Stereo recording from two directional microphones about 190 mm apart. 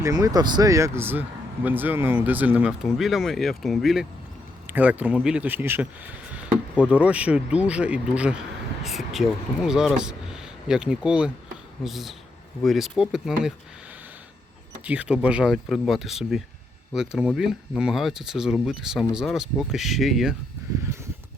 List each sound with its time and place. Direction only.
0.0 s speech: 20° right (ahead or behind); by 13.5 s centre (ahead or behind)
14.8 s speech: 5° right (ahead or behind)